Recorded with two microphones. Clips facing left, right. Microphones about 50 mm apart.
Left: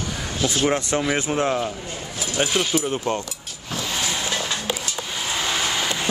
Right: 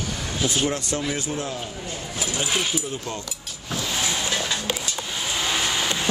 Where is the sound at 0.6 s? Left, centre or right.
Left.